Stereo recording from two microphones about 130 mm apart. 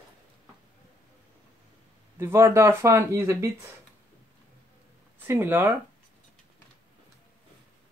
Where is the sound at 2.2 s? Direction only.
20° right (ahead or behind).